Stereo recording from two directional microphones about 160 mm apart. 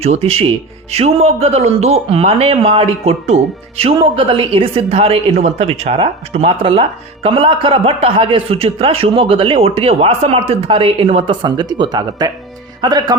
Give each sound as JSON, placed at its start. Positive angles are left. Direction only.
{"t": 0.0, "sound": "speech", "side_deg": -40}